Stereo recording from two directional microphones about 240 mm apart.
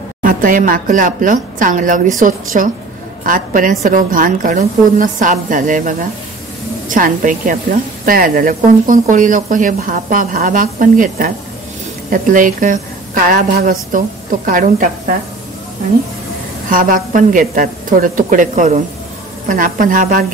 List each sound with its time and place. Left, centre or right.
0.2 s a woman's voice: right
16.7 s a woman's voice: right